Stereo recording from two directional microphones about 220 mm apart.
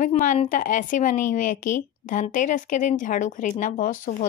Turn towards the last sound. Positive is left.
turn(degrees=35)  # may be behind; listen again after turning